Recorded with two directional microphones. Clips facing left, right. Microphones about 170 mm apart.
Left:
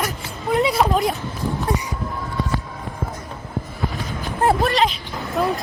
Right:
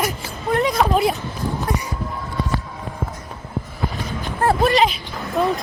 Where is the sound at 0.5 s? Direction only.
15° left (ahead or behind).